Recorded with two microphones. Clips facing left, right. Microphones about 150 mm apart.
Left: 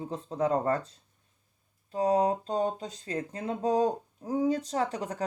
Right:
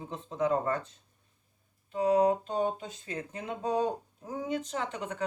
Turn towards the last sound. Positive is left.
turn(degrees=35)  # may be behind; listen again after turning